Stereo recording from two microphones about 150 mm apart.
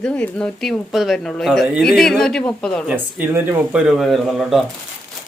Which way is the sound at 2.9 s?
10° right (ahead or behind).